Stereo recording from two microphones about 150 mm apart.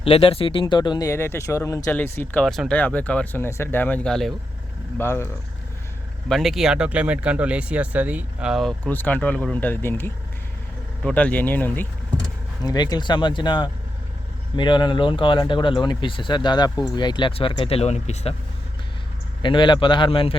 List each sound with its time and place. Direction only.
0.0 s speech: 40° left (ahead or behind); by 2.4 s 15° left (ahead or behind)
2.4 s speech: centre (ahead or behind)
4.9 s speech: 15° left (ahead or behind)
6.2 s speech: centre (ahead or behind)
8.8 s speech: 10° left (ahead or behind)
12.6 s speech: 25° left (ahead or behind); by 18.3 s 45° left (ahead or behind)
19.4 s speech: 30° left (ahead or behind)